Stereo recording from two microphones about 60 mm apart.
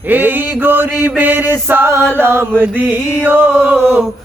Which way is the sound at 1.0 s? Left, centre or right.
Right.